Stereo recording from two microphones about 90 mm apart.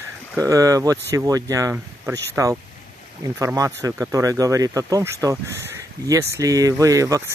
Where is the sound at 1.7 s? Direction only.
25° right (ahead or behind); by 5.0 s 40° right (ahead or behind).